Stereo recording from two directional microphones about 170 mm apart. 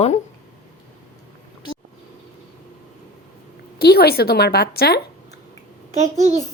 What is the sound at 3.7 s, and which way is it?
A woman's voice, 65° left (ahead or behind).